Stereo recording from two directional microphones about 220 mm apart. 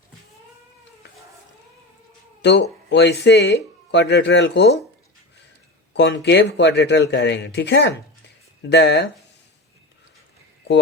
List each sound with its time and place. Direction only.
2.4 s speech: 50° left (ahead or behind)
5.9 s speech: 50° left (ahead or behind)